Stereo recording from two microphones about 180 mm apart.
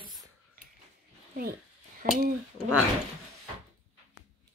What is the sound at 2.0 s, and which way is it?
Speech, 55° right (ahead or behind).